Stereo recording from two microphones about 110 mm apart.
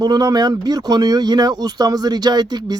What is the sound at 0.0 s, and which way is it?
Speech, 35° right (ahead or behind).